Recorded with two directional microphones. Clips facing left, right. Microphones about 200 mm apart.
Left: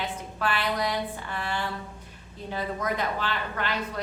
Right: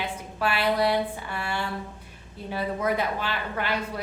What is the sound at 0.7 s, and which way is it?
Speech, 30° right (ahead or behind).